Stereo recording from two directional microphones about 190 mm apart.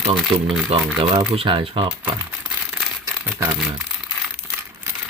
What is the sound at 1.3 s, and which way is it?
Speech, 30° right (ahead or behind).